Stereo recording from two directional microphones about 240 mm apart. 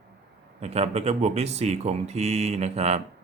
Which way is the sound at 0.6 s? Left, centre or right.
Right.